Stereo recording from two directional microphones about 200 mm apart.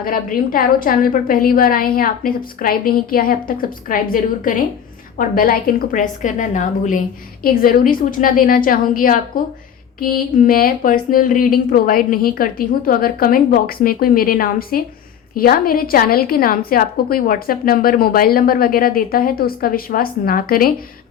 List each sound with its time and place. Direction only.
0.0 s a woman's voice: 45° left (ahead or behind)